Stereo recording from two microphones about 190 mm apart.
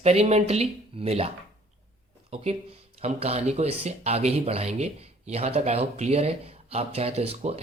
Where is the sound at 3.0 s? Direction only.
35° right (ahead or behind).